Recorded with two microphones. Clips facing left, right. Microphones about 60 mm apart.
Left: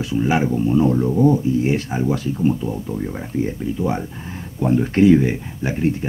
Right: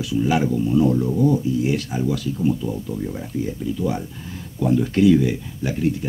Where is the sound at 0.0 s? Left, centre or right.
Left.